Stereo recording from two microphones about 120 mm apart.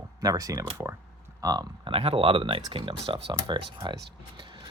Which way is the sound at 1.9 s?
50° right (ahead or behind).